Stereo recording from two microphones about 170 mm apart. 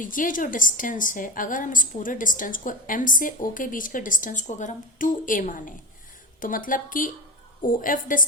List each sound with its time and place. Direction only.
0.0 s a woman's voice: 50° left (ahead or behind)